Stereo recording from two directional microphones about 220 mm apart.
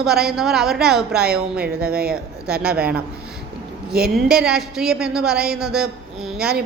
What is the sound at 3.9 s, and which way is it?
Speech, 45° right (ahead or behind).